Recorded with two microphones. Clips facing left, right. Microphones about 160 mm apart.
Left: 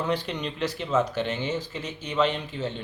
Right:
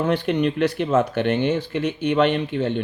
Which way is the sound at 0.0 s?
60° right (ahead or behind).